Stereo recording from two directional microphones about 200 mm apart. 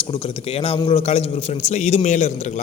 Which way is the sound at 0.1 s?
25° left (ahead or behind).